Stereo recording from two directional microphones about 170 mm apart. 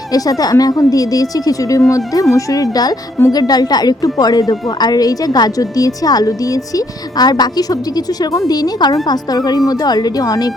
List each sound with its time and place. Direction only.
0.1 s a woman's voice: 20° left (ahead or behind)